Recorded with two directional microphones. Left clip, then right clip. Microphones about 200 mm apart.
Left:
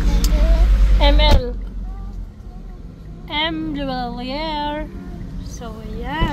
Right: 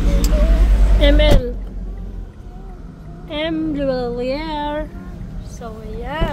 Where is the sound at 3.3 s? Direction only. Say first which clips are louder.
Even; 20° left (ahead or behind).